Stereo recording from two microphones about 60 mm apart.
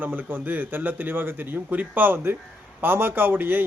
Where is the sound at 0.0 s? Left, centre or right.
Right.